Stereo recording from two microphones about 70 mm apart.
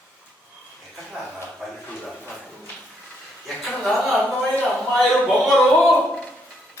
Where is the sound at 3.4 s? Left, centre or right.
Centre.